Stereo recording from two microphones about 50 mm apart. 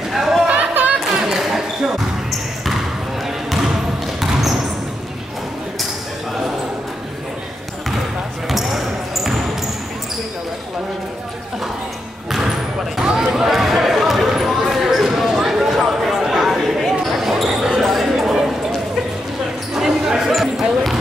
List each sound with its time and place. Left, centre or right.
0.1 s chatter: centre
0.5 s a sound: right
0.9 s basketball bounce: centre
3.4 s basketball bounce: centre
8.5 s basketball bounce: centre
13.3 s basketball bounce: centre
15.7 s a sound: centre
16.5 s basketball bounce: centre
19.7 s basketball bounce: centre